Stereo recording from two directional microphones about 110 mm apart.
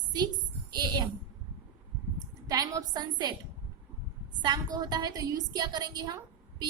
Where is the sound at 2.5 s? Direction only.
35° right (ahead or behind).